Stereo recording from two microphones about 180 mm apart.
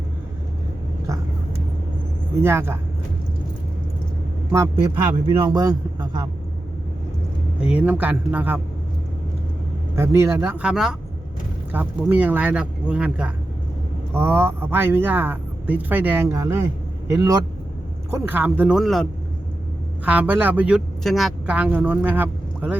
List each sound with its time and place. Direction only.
2.3 s a man's voice: 15° right (ahead or behind)
4.5 s a man's voice: 15° right (ahead or behind)
7.8 s a man's voice: 10° right (ahead or behind)
9.9 s a man's voice: 15° right (ahead or behind)
20.1 s a man's voice: 10° right (ahead or behind)